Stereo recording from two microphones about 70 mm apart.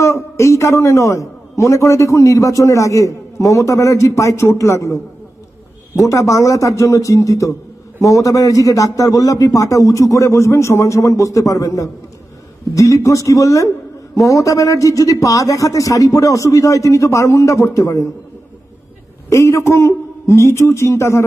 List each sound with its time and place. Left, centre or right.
0.0 s a man's voice: left
19.2 s a man's voice: left